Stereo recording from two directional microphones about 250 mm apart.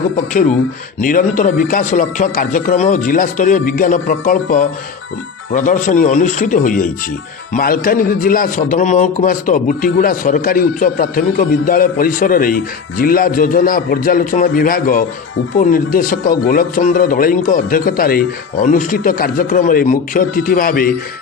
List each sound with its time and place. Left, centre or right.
1.0 s speech: left